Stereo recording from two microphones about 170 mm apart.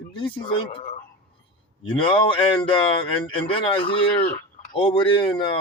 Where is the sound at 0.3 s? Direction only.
30° left (ahead or behind).